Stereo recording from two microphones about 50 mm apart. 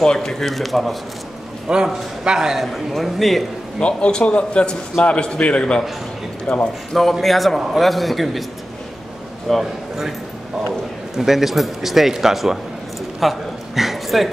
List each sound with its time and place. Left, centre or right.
0.0 s a man's voice: centre
1.7 s a man's voice: centre
2.6 s a man's voice: centre
3.8 s a man's voice: left
6.9 s a man's voice: centre
9.5 s a man's voice: centre
11.1 s a man's voice: centre
13.2 s a sound: centre